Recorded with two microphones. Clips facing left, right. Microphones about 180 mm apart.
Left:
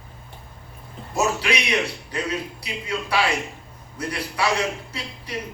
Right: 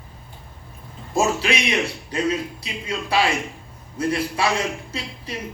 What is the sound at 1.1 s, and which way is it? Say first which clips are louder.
A man's voice: right 2 dB; 25° right (ahead or behind).